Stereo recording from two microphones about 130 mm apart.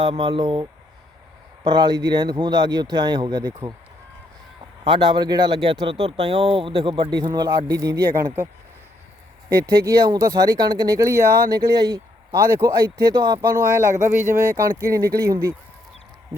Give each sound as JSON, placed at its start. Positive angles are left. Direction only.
{"t": 0.0, "sound": "speech", "side_deg": -40}
{"t": 1.6, "sound": "speech", "side_deg": -35}
{"t": 4.8, "sound": "speech", "side_deg": -40}
{"t": 9.8, "sound": "speech", "side_deg": -25}